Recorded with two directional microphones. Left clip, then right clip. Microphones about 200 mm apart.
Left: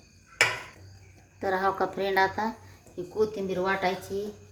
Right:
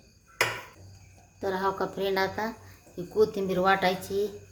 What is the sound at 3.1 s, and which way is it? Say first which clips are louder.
Speech: right 3 dB; 15° right (ahead or behind).